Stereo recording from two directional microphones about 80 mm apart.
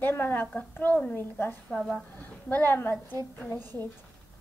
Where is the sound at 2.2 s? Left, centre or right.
Left.